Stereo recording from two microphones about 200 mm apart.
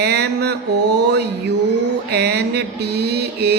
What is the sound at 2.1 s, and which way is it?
A man's voice, 55° right (ahead or behind).